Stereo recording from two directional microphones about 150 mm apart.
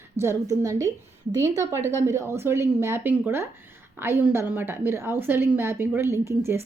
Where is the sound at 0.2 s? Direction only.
20° right (ahead or behind).